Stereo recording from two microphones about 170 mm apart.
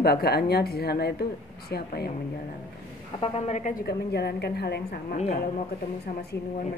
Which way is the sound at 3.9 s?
75° left (ahead or behind).